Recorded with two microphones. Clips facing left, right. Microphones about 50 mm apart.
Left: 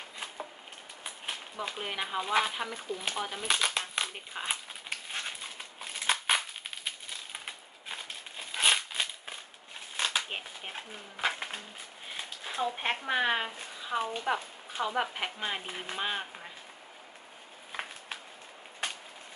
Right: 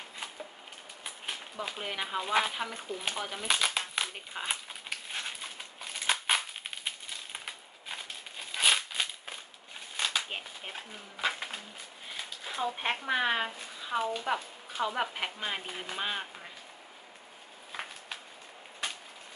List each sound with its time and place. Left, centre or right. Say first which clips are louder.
1.0 s a sound: even; centre
7.3 s crumpling: even; centre
9.9 s shuffling cards: left 1 dB; centre
11.1 s speech: left 1 dB; centre
12.4 s speech: left 1 dB; centre